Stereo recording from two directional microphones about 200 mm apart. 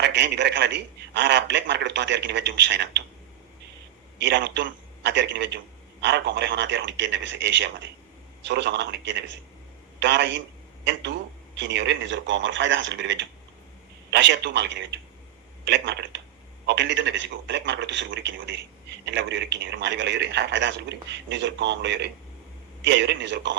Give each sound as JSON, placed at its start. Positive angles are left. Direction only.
{"t": 0.0, "sound": "a man's voice", "side_deg": -60}
{"t": 4.2, "sound": "a man's voice", "side_deg": -60}
{"t": 11.5, "sound": "a man's voice", "side_deg": -65}